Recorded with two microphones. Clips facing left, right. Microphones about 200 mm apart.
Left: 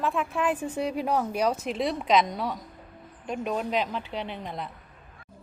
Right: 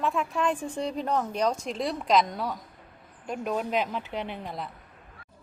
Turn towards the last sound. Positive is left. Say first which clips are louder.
# even
turn(degrees=0)  # may be behind; listen again after turning